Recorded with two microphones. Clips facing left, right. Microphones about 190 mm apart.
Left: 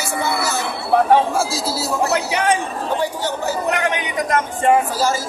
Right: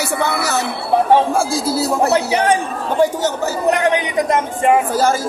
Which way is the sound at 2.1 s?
35° right (ahead or behind).